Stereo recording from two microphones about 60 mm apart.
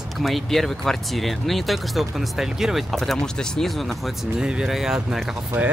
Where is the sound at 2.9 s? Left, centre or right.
Centre.